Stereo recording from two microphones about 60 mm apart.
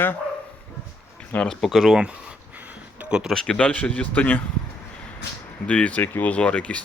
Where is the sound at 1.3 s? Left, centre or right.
Left.